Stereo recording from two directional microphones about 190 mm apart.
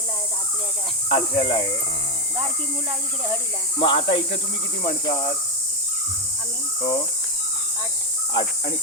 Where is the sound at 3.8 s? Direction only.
25° left (ahead or behind).